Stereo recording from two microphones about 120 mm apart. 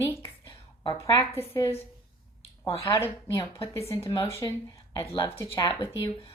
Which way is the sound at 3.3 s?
40° left (ahead or behind).